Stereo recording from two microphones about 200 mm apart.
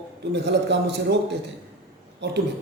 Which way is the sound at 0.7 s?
60° right (ahead or behind).